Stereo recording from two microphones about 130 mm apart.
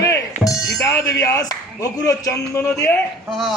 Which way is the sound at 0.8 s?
25° left (ahead or behind).